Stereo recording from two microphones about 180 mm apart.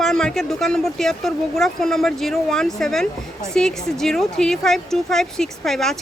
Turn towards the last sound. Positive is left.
turn(degrees=0)  # may be behind; listen again after turning